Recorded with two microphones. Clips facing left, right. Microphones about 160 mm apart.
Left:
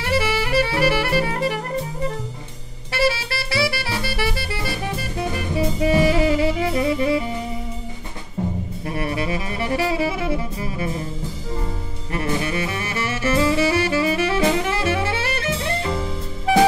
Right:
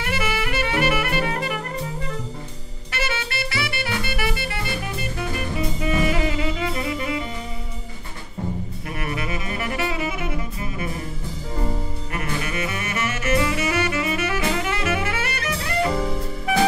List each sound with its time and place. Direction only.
0.0 s music: 30° left (ahead or behind)
2.9 s music: 30° left (ahead or behind)
8.8 s music: 30° left (ahead or behind)
12.1 s saxophone: 30° left (ahead or behind)
16.5 s music: 30° left (ahead or behind)